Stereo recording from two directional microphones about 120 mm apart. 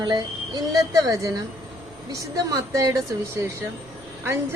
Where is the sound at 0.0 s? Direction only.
35° right (ahead or behind).